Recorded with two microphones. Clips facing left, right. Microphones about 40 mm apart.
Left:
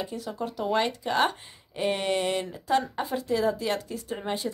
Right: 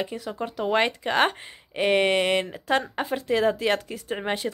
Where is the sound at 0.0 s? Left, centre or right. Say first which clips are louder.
Right 2 dB; right.